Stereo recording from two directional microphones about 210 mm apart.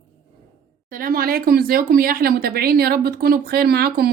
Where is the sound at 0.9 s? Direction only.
40° right (ahead or behind).